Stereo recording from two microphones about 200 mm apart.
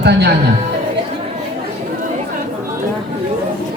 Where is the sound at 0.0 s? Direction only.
55° right (ahead or behind).